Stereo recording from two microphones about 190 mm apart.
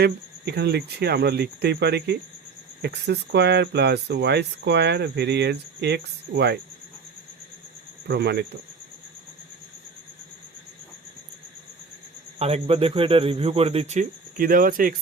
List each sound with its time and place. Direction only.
0.0 s speech: 60° right (ahead or behind)
8.0 s speech: 60° right (ahead or behind)
12.4 s a man's voice: 30° right (ahead or behind); by 14.9 s 45° right (ahead or behind)